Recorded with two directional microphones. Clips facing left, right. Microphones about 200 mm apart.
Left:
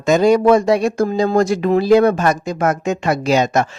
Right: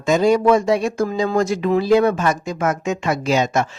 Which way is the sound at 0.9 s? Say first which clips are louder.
Left 3 dB; 35° left (ahead or behind).